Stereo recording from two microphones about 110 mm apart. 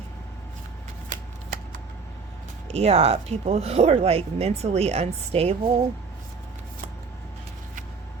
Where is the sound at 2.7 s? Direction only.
65° right (ahead or behind).